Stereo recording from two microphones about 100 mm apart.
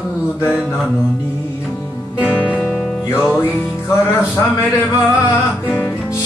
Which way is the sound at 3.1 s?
25° left (ahead or behind).